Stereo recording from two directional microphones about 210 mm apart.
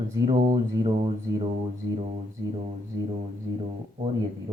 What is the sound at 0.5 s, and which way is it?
Speech, 20° right (ahead or behind).